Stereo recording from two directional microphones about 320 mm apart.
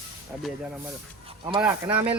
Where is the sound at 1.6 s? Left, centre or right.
Centre.